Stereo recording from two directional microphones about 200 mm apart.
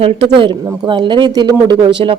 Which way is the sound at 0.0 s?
25° right (ahead or behind).